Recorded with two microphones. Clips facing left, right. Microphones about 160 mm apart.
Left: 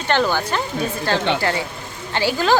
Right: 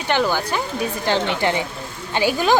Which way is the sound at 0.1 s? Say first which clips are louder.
Left 1 dB; 10° right (ahead or behind).